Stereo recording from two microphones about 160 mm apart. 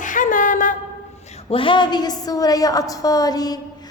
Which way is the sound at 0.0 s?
55° left (ahead or behind).